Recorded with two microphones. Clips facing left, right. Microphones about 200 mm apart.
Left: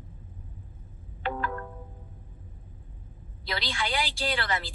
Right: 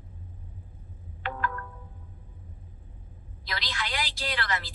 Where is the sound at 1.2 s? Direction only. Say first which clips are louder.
Left 2 dB; 30° left (ahead or behind).